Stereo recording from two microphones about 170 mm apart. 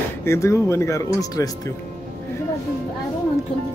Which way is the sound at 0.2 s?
15° left (ahead or behind).